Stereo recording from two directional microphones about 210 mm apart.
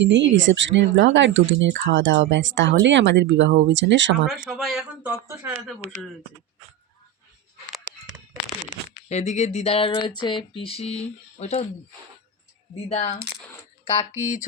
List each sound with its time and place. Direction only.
0.0 s speech: 60° right (ahead or behind)
4.3 s a man's voice: centre (ahead or behind)
5.5 s speech: 30° right (ahead or behind)
9.0 s speech: 30° left (ahead or behind)
12.9 s speech: 30° left (ahead or behind)
14.2 s speech: 35° left (ahead or behind)